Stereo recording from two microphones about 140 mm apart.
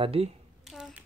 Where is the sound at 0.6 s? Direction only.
5° right (ahead or behind).